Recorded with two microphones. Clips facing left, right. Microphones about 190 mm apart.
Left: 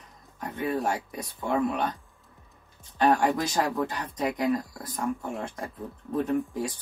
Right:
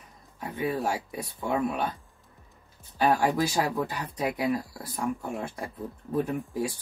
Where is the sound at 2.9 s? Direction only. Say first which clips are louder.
Left 1 dB; centre (ahead or behind).